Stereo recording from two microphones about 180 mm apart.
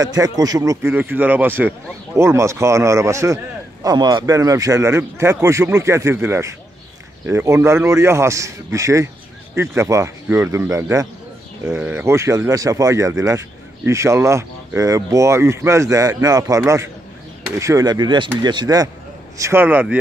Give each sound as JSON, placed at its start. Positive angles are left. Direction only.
{"t": 0.0, "sound": "speech", "side_deg": -20}